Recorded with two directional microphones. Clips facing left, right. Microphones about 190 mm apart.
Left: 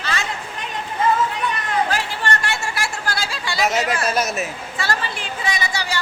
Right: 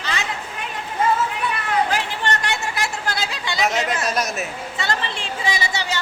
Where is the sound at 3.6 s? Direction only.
Centre (ahead or behind).